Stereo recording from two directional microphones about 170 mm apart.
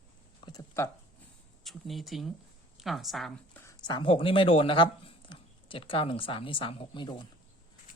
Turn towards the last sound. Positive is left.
turn(degrees=30)  # may be behind; listen again after turning